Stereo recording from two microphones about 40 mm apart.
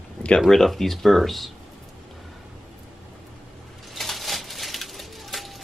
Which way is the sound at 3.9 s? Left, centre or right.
Centre.